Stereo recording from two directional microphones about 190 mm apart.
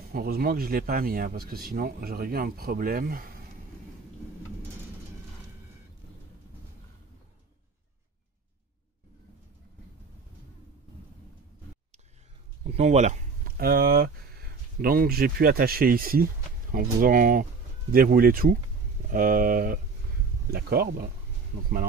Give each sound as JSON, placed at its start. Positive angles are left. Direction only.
{"t": 0.1, "sound": "speech", "side_deg": -50}
{"t": 12.6, "sound": "speech", "side_deg": -35}